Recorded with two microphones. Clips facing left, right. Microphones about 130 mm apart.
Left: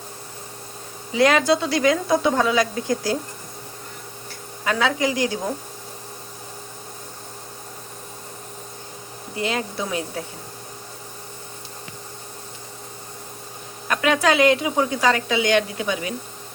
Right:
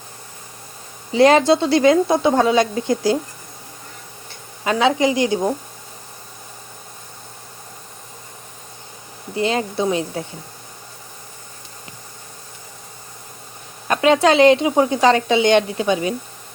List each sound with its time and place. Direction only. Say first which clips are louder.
1.1 s a woman's voice: right 5 dB; 30° right (ahead or behind)
4.6 s a woman's voice: right 5 dB; 20° right (ahead or behind)
9.3 s a woman's voice: right 5 dB; 25° right (ahead or behind)
13.8 s a woman's voice: right 5 dB; 30° right (ahead or behind)